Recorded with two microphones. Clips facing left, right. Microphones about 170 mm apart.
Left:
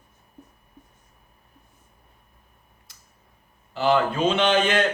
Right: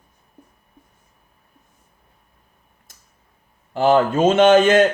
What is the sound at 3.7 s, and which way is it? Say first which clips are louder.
Speech: right 5 dB; 50° right (ahead or behind).